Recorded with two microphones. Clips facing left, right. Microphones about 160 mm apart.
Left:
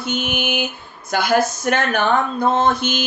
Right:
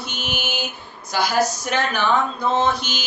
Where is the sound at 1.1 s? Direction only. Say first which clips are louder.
Left 3 dB; 55° left (ahead or behind).